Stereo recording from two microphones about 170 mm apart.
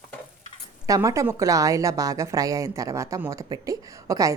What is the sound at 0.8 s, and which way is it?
A woman's voice, 20° right (ahead or behind).